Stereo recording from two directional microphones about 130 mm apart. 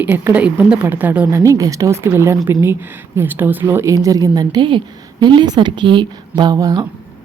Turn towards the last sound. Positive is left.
turn(degrees=-30)  # may be behind; listen again after turning